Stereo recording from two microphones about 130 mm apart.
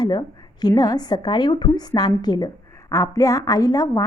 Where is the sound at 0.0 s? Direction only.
35° left (ahead or behind).